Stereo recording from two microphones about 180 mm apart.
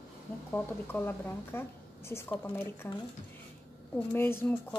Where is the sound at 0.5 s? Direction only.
10° left (ahead or behind).